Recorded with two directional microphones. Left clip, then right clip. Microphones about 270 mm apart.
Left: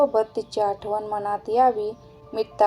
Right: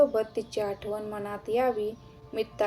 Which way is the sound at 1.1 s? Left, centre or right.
Left.